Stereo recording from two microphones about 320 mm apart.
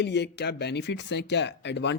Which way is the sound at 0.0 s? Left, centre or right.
Left.